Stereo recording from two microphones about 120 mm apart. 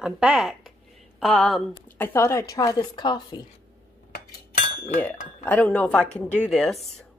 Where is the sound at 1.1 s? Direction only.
5° left (ahead or behind).